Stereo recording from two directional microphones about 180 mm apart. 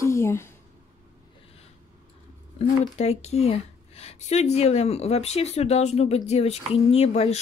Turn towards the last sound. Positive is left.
turn(degrees=35)  # may be behind; listen again after turning